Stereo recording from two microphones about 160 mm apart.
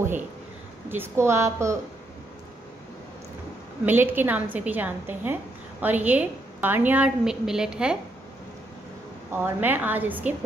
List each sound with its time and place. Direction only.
0.8 s a woman's voice: 15° right (ahead or behind)
3.8 s a woman's voice: 10° right (ahead or behind)
9.4 s a woman's voice: 10° right (ahead or behind)